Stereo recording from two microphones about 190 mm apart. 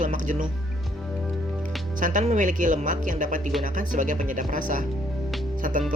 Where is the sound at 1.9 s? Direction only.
40° right (ahead or behind).